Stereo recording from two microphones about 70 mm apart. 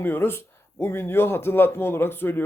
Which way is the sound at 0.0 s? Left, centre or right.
Left.